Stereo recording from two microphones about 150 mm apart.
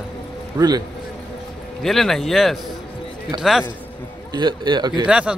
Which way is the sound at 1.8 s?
Centre (ahead or behind).